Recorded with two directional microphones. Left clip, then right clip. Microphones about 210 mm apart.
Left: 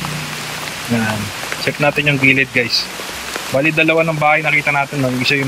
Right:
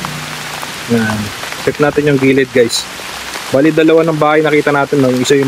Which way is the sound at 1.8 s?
15° right (ahead or behind).